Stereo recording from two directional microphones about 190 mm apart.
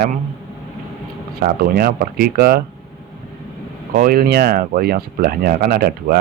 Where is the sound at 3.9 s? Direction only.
50° right (ahead or behind).